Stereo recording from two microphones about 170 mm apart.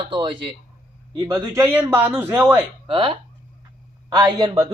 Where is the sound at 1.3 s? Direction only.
15° right (ahead or behind).